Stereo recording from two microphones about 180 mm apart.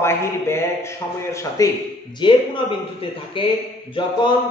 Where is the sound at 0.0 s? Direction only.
15° left (ahead or behind).